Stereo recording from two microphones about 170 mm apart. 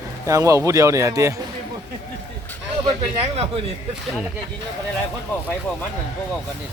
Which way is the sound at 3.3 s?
35° right (ahead or behind).